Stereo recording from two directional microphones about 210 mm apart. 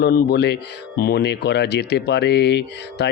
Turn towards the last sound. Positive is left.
turn(degrees=55)  # may be behind; listen again after turning